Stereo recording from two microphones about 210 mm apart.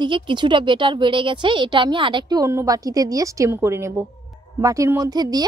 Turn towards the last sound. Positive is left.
turn(degrees=-20)  # may be behind; listen again after turning